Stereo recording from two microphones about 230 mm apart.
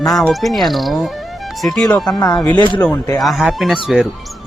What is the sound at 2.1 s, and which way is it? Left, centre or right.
Speech, centre.